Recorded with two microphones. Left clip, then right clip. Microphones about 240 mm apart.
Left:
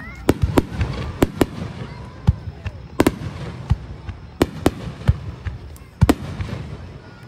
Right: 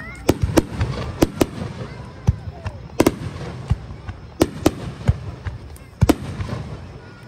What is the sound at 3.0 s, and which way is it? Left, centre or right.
Fireworks, centre.